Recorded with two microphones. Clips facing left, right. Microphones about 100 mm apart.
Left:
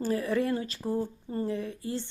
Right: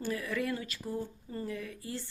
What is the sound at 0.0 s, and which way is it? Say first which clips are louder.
A woman's voice: left 6 dB; 35° left (ahead or behind).